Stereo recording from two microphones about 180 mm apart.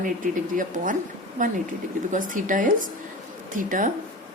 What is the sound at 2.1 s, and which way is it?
A woman's voice, 45° right (ahead or behind).